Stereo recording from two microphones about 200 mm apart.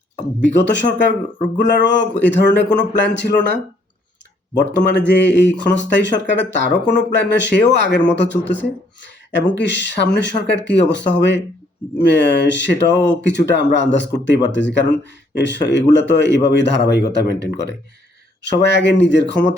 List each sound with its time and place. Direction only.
0.4 s speech: 60° left (ahead or behind)
4.5 s speech: 60° left (ahead or behind)